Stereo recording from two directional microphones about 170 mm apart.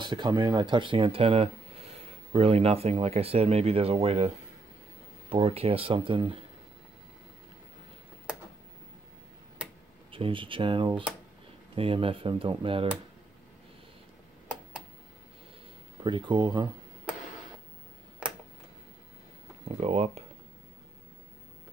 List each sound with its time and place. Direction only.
0.0 s speech: 25° right (ahead or behind)
5.3 s speech: 35° right (ahead or behind)
10.1 s speech: 30° right (ahead or behind)
16.0 s speech: 30° right (ahead or behind)
18.2 s a sound: 5° right (ahead or behind)
19.8 s speech: 40° right (ahead or behind)